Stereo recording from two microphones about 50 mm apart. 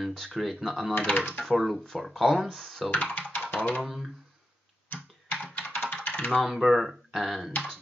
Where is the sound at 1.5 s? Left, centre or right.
Centre.